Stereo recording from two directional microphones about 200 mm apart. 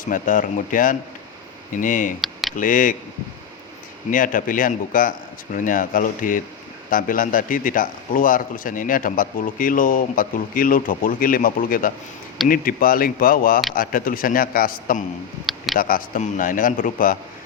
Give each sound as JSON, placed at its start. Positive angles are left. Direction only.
{"t": 0.0, "sound": "speech", "side_deg": 40}
{"t": 4.1, "sound": "a man's voice", "side_deg": 40}
{"t": 15.4, "sound": "speech", "side_deg": 0}
{"t": 15.8, "sound": "a man's voice", "side_deg": 45}